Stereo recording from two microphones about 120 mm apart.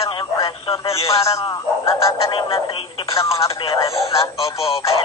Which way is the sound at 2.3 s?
45° left (ahead or behind).